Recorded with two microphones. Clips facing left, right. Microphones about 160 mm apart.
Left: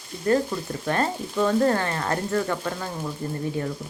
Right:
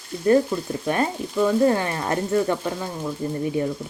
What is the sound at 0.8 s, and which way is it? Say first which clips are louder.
Speech: even; 10° right (ahead or behind).